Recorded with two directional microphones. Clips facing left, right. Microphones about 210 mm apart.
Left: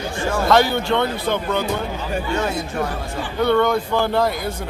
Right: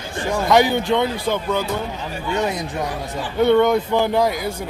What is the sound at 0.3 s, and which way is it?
Speech, 15° right (ahead or behind).